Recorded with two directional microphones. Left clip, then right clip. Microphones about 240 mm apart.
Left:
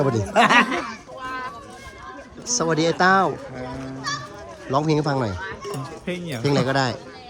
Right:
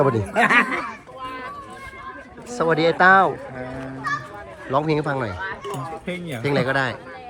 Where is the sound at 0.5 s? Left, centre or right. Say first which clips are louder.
Left 1 dB; left.